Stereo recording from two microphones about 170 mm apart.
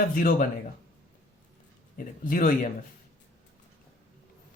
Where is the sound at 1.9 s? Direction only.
55° left (ahead or behind).